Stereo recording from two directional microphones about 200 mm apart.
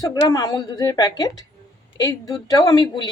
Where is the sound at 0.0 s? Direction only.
20° left (ahead or behind).